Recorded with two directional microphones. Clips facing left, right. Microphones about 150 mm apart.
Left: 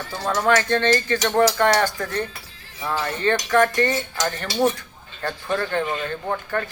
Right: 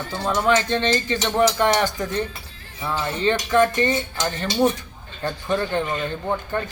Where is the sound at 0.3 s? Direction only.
25° right (ahead or behind).